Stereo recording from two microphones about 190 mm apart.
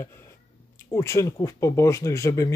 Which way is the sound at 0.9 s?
15° left (ahead or behind).